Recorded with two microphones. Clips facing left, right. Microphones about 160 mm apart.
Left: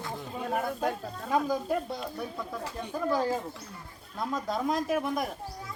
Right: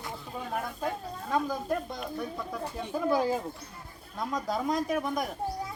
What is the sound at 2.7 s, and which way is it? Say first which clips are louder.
Speech: right 1 dB; 10° right (ahead or behind).